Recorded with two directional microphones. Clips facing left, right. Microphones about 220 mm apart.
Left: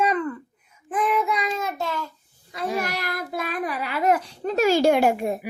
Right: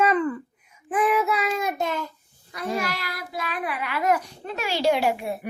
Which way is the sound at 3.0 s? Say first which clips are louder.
Left 4 dB; 50° left (ahead or behind).